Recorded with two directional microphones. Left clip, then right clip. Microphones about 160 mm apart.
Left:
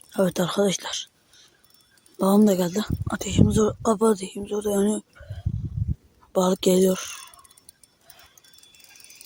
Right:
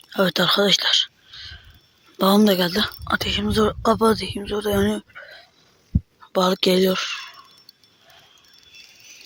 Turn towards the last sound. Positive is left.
turn(degrees=15)  # may be behind; listen again after turning